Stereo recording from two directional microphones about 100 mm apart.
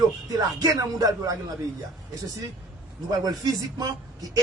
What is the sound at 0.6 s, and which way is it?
Speech, 40° right (ahead or behind).